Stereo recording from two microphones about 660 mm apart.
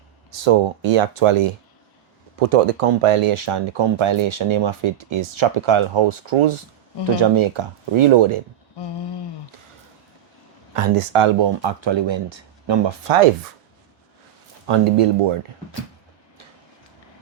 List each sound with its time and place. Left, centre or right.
0.3 s speech: right
2.4 s speech: right
10.8 s speech: right
14.7 s speech: right